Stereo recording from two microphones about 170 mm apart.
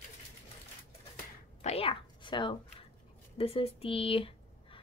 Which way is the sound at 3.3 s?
35° left (ahead or behind).